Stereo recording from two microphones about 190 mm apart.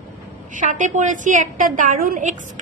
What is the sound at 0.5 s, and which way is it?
A woman's voice, 40° right (ahead or behind).